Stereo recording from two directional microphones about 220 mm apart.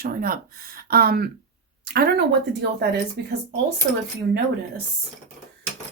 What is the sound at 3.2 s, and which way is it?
Speech, 50° right (ahead or behind).